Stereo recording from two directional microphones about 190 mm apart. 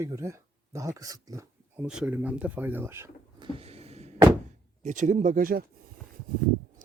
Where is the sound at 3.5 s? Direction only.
30° right (ahead or behind).